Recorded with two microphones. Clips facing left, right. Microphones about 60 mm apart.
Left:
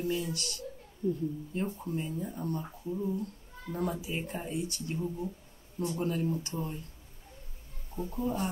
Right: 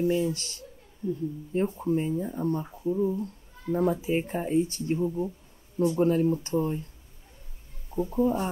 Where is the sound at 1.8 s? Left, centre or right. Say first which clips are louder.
Right 8 dB; right.